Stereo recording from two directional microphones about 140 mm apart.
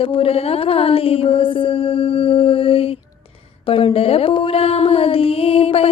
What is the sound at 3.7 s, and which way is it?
Mantra, 40° left (ahead or behind).